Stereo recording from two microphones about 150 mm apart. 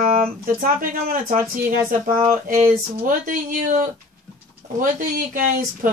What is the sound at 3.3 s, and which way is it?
Speech, 60° right (ahead or behind).